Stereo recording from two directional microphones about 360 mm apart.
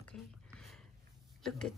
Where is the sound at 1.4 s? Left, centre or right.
Centre.